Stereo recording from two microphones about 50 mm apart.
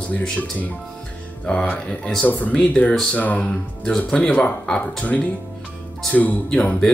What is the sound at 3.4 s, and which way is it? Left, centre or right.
Speech, centre.